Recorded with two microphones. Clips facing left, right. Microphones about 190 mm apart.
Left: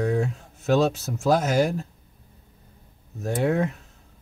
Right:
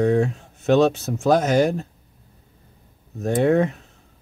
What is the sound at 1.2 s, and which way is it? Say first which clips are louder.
Speech: right 3 dB; 25° right (ahead or behind).